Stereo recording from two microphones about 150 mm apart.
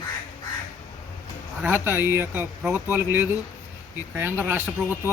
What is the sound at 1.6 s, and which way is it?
Speech, 15° right (ahead or behind).